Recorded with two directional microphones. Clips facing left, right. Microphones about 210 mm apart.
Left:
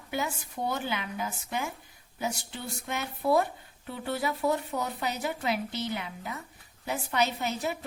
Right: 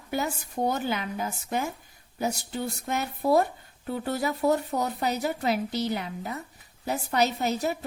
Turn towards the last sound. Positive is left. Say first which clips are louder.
# right 4 dB
turn(degrees=-40)  # may be behind; listen again after turning